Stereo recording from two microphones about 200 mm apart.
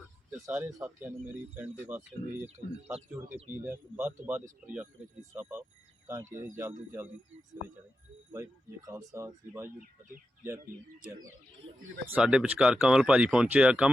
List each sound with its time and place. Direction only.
0.4 s speech: 5° right (ahead or behind)
8.3 s speech: 10° right (ahead or behind)
12.0 s speech: 5° right (ahead or behind)